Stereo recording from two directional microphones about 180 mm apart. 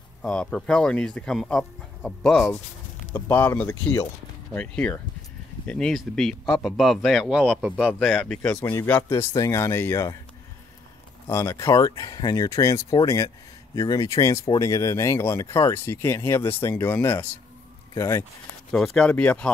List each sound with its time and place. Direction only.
0.2 s speech: 5° left (ahead or behind)
11.2 s speech: 15° left (ahead or behind)
18.7 s speech: 5° left (ahead or behind)